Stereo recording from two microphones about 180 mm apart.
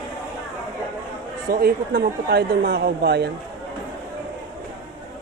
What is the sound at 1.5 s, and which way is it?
Speech, 55° right (ahead or behind).